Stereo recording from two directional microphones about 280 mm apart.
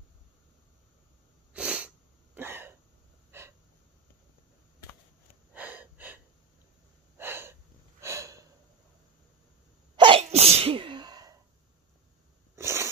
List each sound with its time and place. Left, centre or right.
1.5 s sneeze: centre
2.3 s cough: centre
3.3 s gasp: centre
5.5 s wheeze: centre
7.2 s snort: centre
9.9 s sneeze: centre
12.5 s a sound: centre